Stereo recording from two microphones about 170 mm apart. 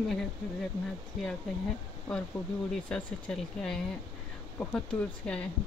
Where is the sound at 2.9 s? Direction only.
5° left (ahead or behind).